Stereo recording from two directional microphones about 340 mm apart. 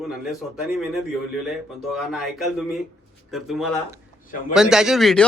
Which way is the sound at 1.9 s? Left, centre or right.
Centre.